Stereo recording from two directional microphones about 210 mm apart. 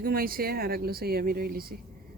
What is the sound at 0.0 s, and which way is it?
Speech, 45° right (ahead or behind).